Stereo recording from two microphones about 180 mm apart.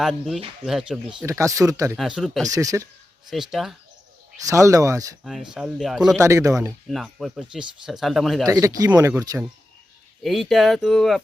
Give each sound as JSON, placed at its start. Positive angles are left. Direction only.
{"t": 0.0, "sound": "speech", "side_deg": 0}
{"t": 1.2, "sound": "speech", "side_deg": -15}
{"t": 2.0, "sound": "speech", "side_deg": 0}
{"t": 2.4, "sound": "speech", "side_deg": -20}
{"t": 3.2, "sound": "speech", "side_deg": 0}
{"t": 4.4, "sound": "speech", "side_deg": -15}
{"t": 5.2, "sound": "speech", "side_deg": -5}
{"t": 6.1, "sound": "speech", "side_deg": -15}
{"t": 6.8, "sound": "speech", "side_deg": 0}
{"t": 8.4, "sound": "speech", "side_deg": -20}
{"t": 10.2, "sound": "speech", "side_deg": 0}